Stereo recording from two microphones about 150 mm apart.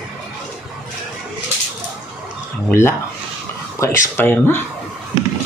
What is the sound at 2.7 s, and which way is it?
Speech, 15° left (ahead or behind).